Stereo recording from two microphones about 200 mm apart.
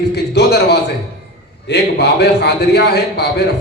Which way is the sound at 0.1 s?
55° left (ahead or behind).